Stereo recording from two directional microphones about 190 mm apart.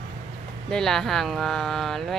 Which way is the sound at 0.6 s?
Centre (ahead or behind).